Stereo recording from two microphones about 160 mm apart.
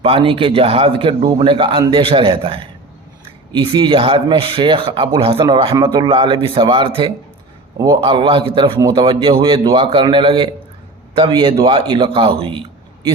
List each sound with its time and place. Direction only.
0.0 s speech: 35° right (ahead or behind)